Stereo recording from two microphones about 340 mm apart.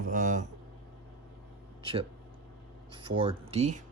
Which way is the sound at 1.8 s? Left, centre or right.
Centre.